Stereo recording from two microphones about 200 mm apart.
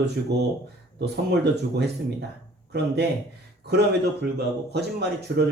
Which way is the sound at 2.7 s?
55° right (ahead or behind).